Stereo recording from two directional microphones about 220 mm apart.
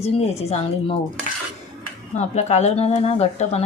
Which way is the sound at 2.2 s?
30° left (ahead or behind).